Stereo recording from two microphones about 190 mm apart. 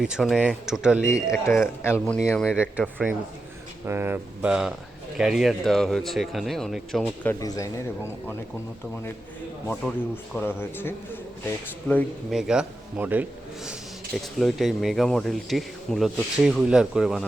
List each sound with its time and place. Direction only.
0.0 s speech: centre (ahead or behind)
1.0 s speech: 15° left (ahead or behind)
2.4 s speech: 5° right (ahead or behind)
3.8 s speech: 10° right (ahead or behind)
7.3 s speech: 20° left (ahead or behind)
9.8 s speech: centre (ahead or behind)
10.3 s speech: 10° left (ahead or behind)
12.4 s speech: 5° right (ahead or behind)
14.3 s speech: centre (ahead or behind)